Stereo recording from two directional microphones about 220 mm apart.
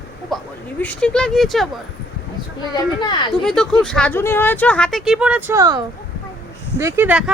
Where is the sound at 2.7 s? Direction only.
20° left (ahead or behind).